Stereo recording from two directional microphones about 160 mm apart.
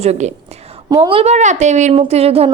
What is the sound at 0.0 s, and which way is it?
A woman's voice, 40° right (ahead or behind).